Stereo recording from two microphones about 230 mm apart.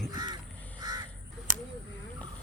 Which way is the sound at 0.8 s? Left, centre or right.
Centre.